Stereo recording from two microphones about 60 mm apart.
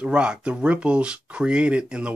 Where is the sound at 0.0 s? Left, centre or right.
Centre.